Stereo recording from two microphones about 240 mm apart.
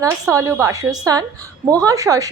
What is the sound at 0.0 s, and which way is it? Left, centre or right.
A woman's voice, centre.